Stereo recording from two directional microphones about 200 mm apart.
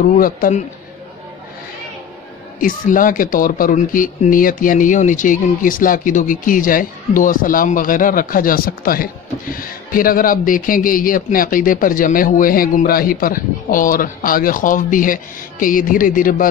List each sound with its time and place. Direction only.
0.2 s a man's voice: 40° left (ahead or behind)
2.6 s speech: 45° left (ahead or behind)